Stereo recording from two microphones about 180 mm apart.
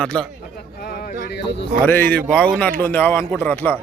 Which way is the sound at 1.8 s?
10° left (ahead or behind).